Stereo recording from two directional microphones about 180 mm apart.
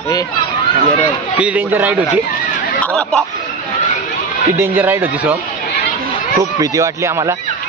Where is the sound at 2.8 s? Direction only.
5° left (ahead or behind).